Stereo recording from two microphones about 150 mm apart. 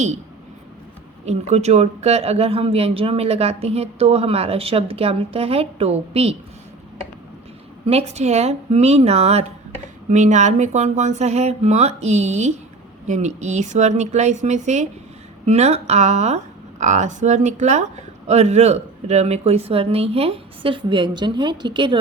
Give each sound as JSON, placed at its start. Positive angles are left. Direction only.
{"t": 1.2, "sound": "speech", "side_deg": -45}
{"t": 7.9, "sound": "speech", "side_deg": -45}